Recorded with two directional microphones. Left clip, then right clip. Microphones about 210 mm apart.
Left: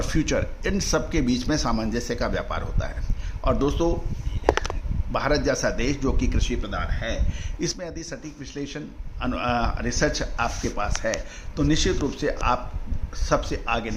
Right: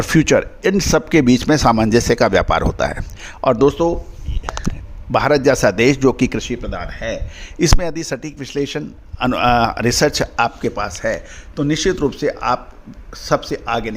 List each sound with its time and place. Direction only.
0.0 s a man's voice: 50° right (ahead or behind)
5.1 s a man's voice: 50° right (ahead or behind); by 13.9 s 30° right (ahead or behind)